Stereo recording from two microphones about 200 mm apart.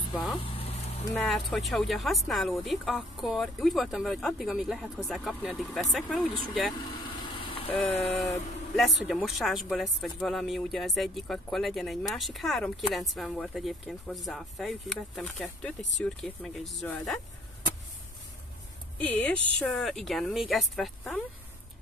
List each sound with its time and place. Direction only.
0.1 s speech: centre (ahead or behind)
0.4 s vehicle: 30° left (ahead or behind)
1.1 s speech: 5° left (ahead or behind)
7.3 s vehicle: 30° left (ahead or behind)
8.2 s speech: centre (ahead or behind)
18.9 s speech: 10° left (ahead or behind)